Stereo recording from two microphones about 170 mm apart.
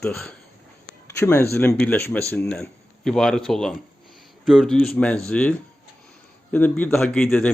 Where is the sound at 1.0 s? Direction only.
15° left (ahead or behind).